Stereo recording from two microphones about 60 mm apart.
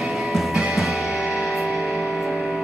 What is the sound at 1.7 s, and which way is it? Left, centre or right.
Music, right.